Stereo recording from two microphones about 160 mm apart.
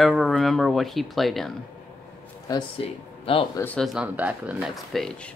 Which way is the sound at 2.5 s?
30° left (ahead or behind).